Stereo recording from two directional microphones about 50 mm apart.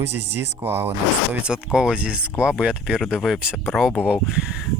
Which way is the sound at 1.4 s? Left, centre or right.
Centre.